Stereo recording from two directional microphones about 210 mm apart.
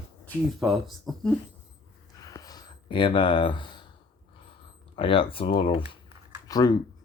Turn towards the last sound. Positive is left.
turn(degrees=20)  # may be behind; listen again after turning